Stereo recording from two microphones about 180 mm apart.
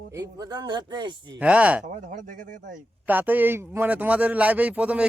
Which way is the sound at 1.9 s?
45° right (ahead or behind).